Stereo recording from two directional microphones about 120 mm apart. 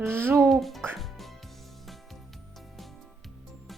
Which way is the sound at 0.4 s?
Centre (ahead or behind).